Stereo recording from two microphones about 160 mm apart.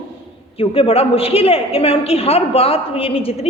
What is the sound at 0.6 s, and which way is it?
A woman's voice, 35° left (ahead or behind).